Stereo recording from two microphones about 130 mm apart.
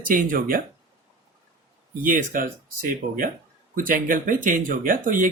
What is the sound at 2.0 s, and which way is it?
Speech, 90° right.